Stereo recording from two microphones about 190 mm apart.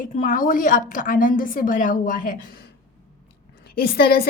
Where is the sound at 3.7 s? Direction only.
55° left (ahead or behind).